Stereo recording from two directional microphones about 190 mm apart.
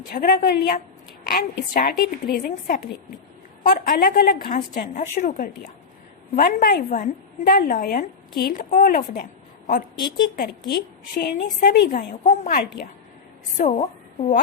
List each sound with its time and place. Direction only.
0.1 s a woman's voice: 50° left (ahead or behind)